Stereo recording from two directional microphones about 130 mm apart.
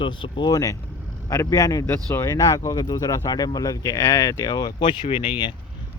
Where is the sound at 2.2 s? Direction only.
25° left (ahead or behind).